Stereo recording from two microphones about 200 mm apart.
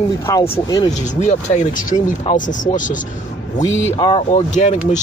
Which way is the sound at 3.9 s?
25° left (ahead or behind).